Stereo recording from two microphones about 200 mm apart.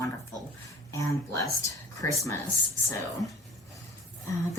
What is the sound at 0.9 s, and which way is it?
Speech, 15° left (ahead or behind).